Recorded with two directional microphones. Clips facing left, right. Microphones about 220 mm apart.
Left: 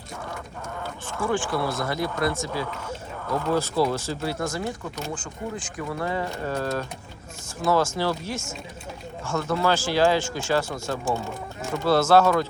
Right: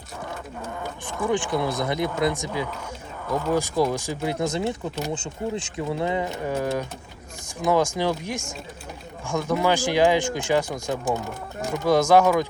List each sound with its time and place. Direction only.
0.8 s speech: 15° right (ahead or behind)